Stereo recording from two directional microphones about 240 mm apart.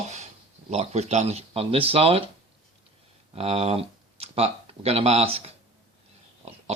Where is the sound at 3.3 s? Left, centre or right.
Right.